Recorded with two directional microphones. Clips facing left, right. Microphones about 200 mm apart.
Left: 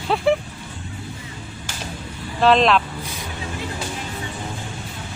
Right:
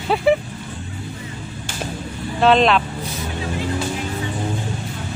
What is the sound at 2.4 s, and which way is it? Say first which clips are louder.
Speech: right 1 dB; centre (ahead or behind).